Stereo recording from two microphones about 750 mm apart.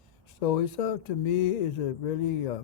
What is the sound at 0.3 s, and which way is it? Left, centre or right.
Speech, left.